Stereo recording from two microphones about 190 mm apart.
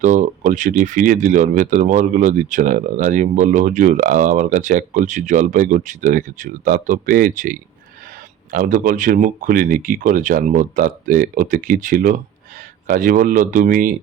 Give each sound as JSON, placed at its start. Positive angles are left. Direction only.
{"t": 0.0, "sound": "speech", "side_deg": -40}